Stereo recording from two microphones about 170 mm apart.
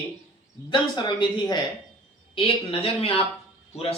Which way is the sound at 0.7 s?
25° left (ahead or behind).